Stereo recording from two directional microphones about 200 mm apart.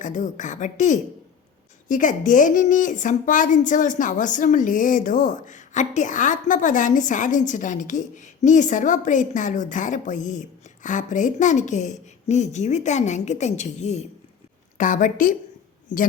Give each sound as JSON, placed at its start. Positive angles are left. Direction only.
{"t": 0.0, "sound": "a woman's voice", "side_deg": 40}